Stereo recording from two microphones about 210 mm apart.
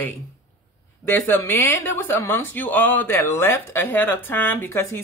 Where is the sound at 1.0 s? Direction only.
10° left (ahead or behind).